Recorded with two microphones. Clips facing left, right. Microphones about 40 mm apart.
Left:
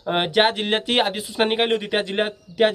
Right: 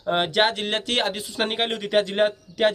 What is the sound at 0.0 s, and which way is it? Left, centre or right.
Speech, centre.